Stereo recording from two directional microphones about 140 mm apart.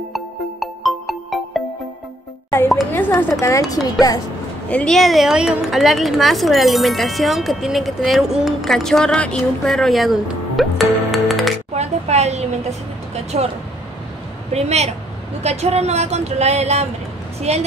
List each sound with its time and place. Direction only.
0.1 s music: centre (ahead or behind)
2.9 s speech: 15° left (ahead or behind)
4.6 s a woman's voice: 5° left (ahead or behind)
9.7 s music: centre (ahead or behind)
11.7 s speech: 50° right (ahead or behind)
14.5 s a woman's voice: 50° right (ahead or behind)